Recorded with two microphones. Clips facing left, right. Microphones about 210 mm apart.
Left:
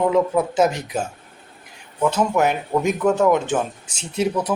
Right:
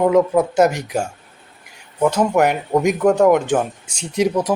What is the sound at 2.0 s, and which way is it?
Speech, 10° right (ahead or behind).